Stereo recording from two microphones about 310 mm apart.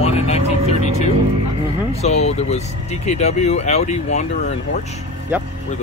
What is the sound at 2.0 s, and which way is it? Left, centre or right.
Speech, left.